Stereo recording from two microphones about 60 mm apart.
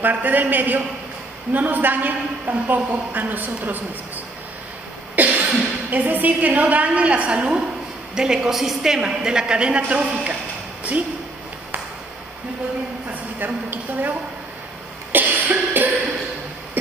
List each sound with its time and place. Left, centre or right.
0.0 s a woman's voice: right
5.1 s cough: right
5.9 s a woman's voice: right
13.4 s a woman's voice: right
15.1 s cough: right